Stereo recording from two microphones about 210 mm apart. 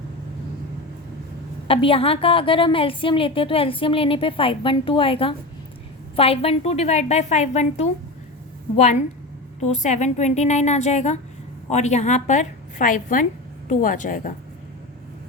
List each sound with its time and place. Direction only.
1.6 s a woman's voice: 25° left (ahead or behind)